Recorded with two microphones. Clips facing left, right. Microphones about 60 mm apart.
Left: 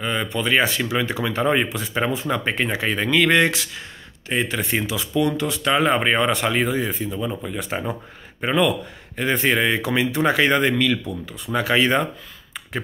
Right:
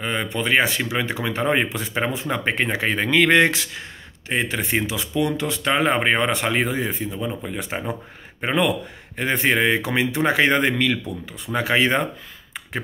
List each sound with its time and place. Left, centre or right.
0.0 s speech: right
7.1 s speech: centre
7.4 s speech: right